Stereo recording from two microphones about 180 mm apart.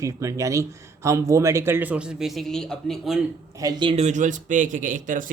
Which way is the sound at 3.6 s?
20° right (ahead or behind).